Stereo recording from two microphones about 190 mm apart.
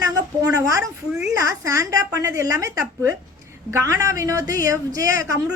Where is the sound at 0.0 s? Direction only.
15° right (ahead or behind).